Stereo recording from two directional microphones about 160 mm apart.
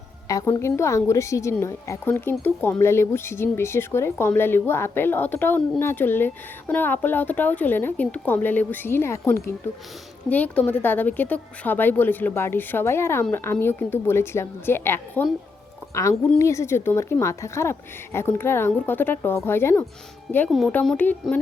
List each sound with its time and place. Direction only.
0.3 s speech: 20° left (ahead or behind)
16.4 s speech: 20° left (ahead or behind)
20.5 s speech: centre (ahead or behind)